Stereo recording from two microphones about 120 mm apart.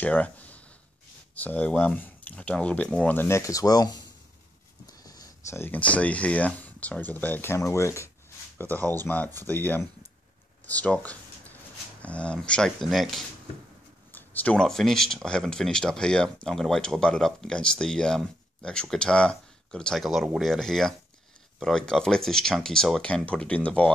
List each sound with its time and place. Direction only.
0.0 s a sound: 10° left (ahead or behind)
1.3 s speech: 10° left (ahead or behind); by 4.0 s 30° left (ahead or behind)
5.0 s speech: 30° left (ahead or behind); by 13.2 s centre (ahead or behind)
14.1 s speech: 15° left (ahead or behind)